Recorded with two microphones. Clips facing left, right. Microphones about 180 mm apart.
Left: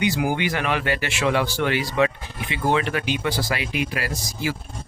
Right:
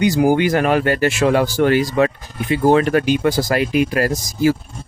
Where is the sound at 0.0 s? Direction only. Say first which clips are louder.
Right 8 dB; 40° right (ahead or behind).